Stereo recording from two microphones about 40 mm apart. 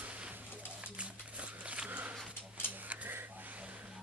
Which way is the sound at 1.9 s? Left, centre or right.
Right.